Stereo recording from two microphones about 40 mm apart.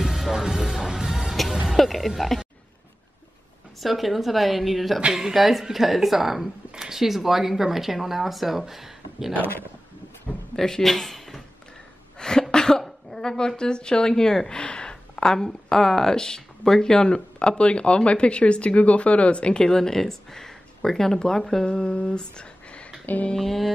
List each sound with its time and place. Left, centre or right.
0.0 s music: centre
1.8 s speech: centre
3.8 s speech: centre
10.5 s speech: centre
12.2 s cough: centre
12.8 s a woman's voice: centre
21.6 s humming: left
23.3 s a woman's voice: centre